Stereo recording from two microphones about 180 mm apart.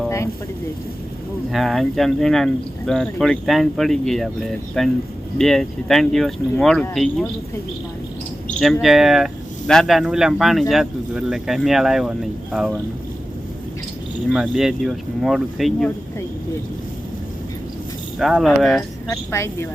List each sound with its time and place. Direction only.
1.5 s speech: centre (ahead or behind)
8.5 s speech: centre (ahead or behind)
14.3 s speech: centre (ahead or behind)
18.2 s speech: centre (ahead or behind)